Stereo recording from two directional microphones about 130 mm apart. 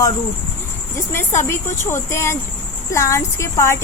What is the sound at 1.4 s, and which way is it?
A woman's voice, 20° left (ahead or behind).